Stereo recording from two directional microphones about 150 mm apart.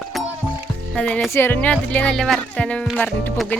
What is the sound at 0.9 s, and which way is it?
Speech, 5° left (ahead or behind).